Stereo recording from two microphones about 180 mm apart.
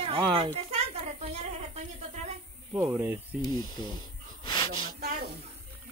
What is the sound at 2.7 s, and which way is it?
Speech, 10° right (ahead or behind).